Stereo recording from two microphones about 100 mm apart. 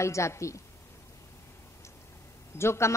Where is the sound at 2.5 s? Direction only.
25° left (ahead or behind).